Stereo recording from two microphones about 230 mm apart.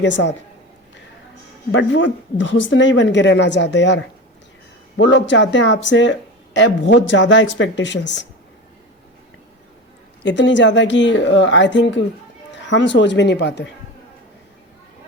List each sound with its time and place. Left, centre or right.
0.0 s speech: left
1.7 s speech: left
10.2 s speech: left